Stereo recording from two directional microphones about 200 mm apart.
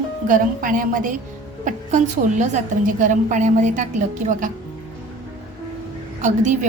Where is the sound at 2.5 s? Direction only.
40° right (ahead or behind).